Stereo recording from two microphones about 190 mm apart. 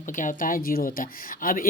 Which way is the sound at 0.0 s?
45° left (ahead or behind).